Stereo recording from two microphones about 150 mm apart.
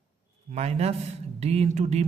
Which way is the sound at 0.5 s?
45° right (ahead or behind).